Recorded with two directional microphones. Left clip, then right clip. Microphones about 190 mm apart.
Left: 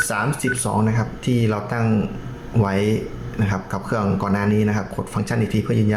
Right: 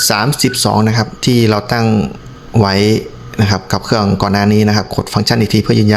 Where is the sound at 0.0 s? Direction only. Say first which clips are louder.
Right 8 dB; 50° right (ahead or behind).